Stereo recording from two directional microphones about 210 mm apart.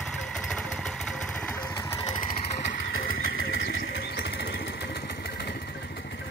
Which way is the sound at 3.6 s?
50° left (ahead or behind).